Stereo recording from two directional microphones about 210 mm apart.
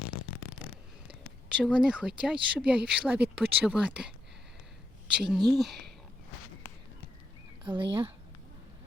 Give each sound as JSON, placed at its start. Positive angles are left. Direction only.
{"t": 1.0, "sound": "speech", "side_deg": -5}
{"t": 5.2, "sound": "speech", "side_deg": 0}
{"t": 7.6, "sound": "speech", "side_deg": -20}